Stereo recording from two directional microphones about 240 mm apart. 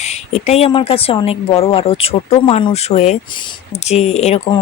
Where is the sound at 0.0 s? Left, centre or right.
Left.